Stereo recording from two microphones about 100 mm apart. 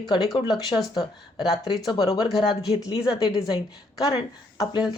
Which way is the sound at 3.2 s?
40° left (ahead or behind).